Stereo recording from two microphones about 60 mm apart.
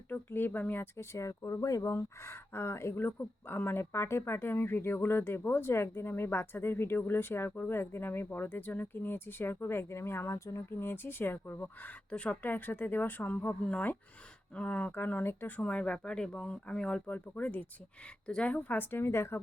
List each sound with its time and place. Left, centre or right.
0.1 s speech: left
0.9 s speech: left
1.9 s speech: left; by 17.0 s centre
17.1 s speech: left
18.8 s speech: left